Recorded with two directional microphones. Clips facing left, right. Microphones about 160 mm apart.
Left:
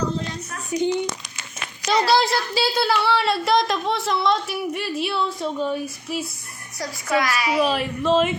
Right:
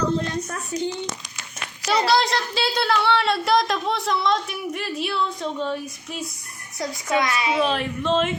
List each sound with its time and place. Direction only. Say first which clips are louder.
0.7 s a sound: left 6 dB; 15° left (ahead or behind)
2.0 s speech: left 1 dB; 5° left (ahead or behind)
6.7 s a child's voice: even; 20° right (ahead or behind)
7.6 s speech: left 2 dB; 5° left (ahead or behind)